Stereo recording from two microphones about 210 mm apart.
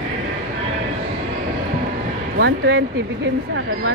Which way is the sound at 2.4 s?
55° right (ahead or behind).